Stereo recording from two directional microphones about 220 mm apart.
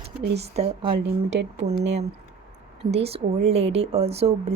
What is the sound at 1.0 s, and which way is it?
Speech, 55° right (ahead or behind).